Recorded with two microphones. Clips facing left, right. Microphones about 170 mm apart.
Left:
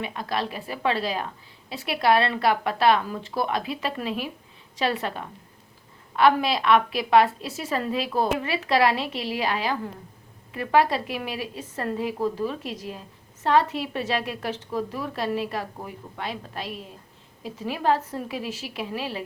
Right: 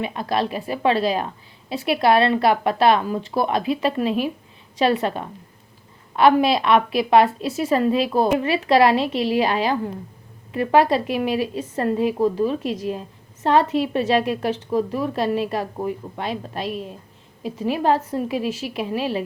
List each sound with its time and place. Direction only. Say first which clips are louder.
0.0 s a woman's voice: right 6 dB; 20° right (ahead or behind)